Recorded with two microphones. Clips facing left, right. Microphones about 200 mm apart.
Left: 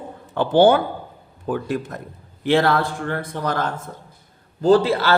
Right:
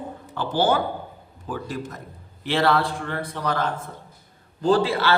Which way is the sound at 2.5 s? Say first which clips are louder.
Left 3 dB; 50° left (ahead or behind).